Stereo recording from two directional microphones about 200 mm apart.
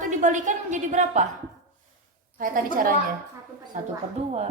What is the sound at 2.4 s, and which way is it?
A woman's voice, 45° right (ahead or behind).